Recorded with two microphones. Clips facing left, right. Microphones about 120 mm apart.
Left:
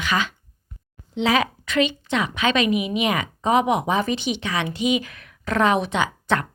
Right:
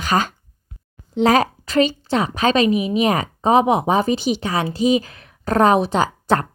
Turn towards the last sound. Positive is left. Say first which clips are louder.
# right 4 dB
turn(degrees=-40)  # may be behind; listen again after turning